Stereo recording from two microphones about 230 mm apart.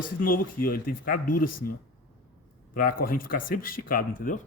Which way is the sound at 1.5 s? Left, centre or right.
Left.